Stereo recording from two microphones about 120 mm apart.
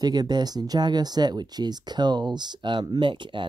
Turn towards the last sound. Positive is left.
turn(degrees=-45)  # may be behind; listen again after turning